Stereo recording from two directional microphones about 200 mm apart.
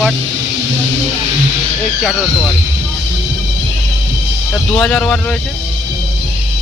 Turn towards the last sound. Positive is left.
turn(degrees=5)  # may be behind; listen again after turning